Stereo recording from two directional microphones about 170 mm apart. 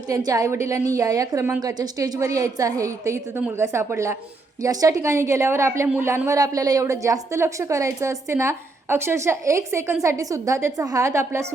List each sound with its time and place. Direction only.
0.1 s a woman's voice: 20° right (ahead or behind)